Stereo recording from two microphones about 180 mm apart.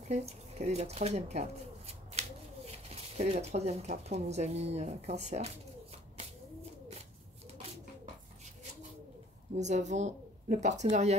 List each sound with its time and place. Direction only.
0.1 s speech: 35° right (ahead or behind)
9.6 s speech: 40° right (ahead or behind)